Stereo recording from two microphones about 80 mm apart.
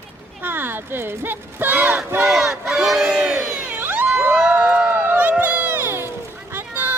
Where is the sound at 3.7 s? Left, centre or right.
Right.